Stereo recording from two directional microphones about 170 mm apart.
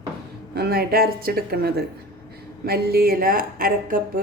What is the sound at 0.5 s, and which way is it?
Speech, 65° right (ahead or behind).